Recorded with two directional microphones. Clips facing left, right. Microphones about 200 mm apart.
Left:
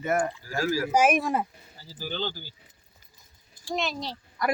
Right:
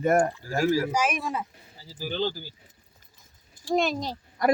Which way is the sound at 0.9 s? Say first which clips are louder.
Left 5 dB; 55° left (ahead or behind).